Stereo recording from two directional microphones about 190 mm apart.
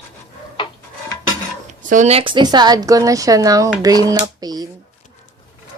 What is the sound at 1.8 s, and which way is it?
A woman's voice, 40° right (ahead or behind).